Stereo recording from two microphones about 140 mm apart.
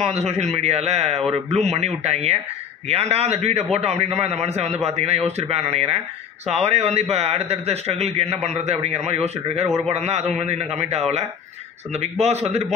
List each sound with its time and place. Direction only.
0.0 s a man's voice: 50° right (ahead or behind)